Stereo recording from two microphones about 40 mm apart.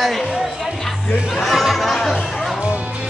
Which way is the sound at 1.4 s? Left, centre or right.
Centre.